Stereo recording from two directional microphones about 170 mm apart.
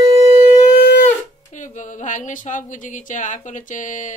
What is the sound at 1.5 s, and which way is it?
Speech, 45° left (ahead or behind).